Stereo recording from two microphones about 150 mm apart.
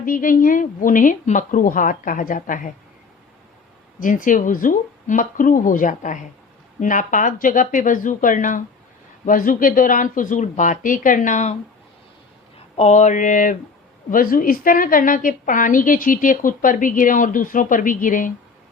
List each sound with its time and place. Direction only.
0.0 s a woman's voice: 65° left (ahead or behind)
4.0 s a woman's voice: 60° left (ahead or behind)
12.7 s a woman's voice: 50° left (ahead or behind)